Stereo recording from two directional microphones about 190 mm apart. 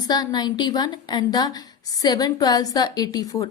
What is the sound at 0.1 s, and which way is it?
A woman's voice, 20° left (ahead or behind).